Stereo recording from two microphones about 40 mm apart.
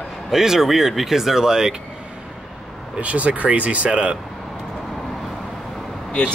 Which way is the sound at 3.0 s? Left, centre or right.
Right.